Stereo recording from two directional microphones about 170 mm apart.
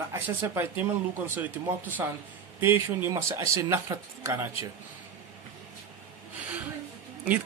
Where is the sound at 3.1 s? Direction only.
15° right (ahead or behind).